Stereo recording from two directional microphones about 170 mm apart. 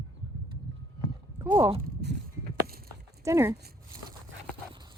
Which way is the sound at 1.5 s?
10° right (ahead or behind).